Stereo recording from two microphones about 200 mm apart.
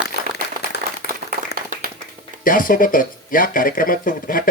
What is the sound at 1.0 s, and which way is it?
Applause, 55° left (ahead or behind).